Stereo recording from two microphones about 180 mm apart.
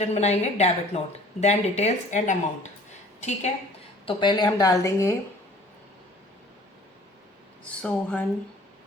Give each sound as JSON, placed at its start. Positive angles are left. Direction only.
{"t": 0.0, "sound": "a woman's voice", "side_deg": 35}
{"t": 4.0, "sound": "a woman's voice", "side_deg": 25}
{"t": 7.6, "sound": "speech", "side_deg": 5}